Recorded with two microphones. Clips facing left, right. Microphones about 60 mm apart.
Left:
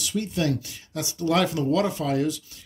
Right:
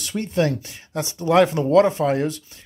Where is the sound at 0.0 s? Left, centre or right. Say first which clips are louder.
Right 4 dB; right.